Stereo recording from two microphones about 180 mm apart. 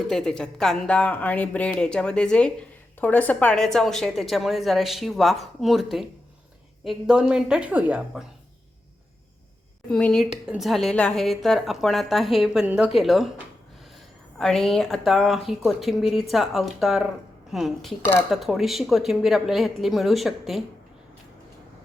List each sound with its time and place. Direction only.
0.1 s speech: 5° left (ahead or behind)
9.9 s speech: 5° left (ahead or behind)
14.3 s speech: 5° left (ahead or behind)